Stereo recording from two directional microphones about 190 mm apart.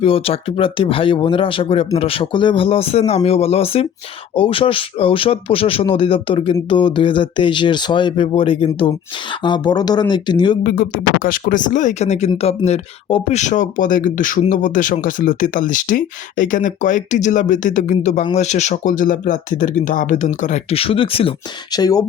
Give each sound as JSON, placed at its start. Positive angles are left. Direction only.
{"t": 0.0, "sound": "speech", "side_deg": 30}
{"t": 10.6, "sound": "speech", "side_deg": 50}